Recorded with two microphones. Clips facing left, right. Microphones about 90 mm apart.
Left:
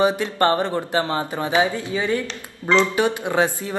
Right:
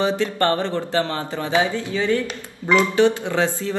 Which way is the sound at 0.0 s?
20° left (ahead or behind).